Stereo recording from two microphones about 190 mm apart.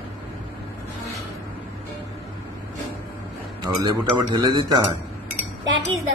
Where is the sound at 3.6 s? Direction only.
20° right (ahead or behind).